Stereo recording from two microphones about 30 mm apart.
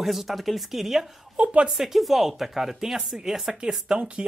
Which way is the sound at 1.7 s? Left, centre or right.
Centre.